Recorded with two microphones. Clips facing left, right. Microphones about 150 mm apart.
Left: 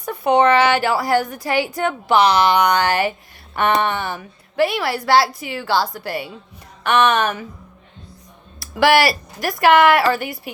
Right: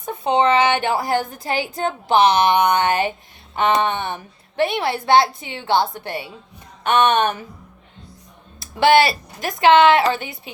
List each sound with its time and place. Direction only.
0.3 s a woman's voice: 20° right (ahead or behind)
8.5 s a woman's voice: 25° right (ahead or behind)